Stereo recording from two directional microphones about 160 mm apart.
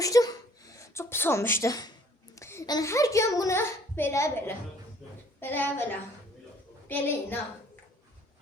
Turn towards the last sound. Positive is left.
turn(degrees=15)  # may be behind; listen again after turning